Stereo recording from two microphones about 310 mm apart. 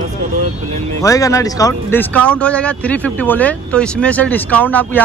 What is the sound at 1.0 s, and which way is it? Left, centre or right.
Speech, centre.